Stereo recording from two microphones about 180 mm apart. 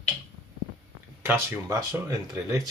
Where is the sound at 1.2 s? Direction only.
15° right (ahead or behind).